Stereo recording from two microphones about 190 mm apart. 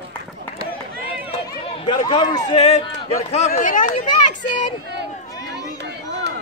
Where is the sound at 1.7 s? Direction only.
25° left (ahead or behind); by 4.1 s 40° left (ahead or behind).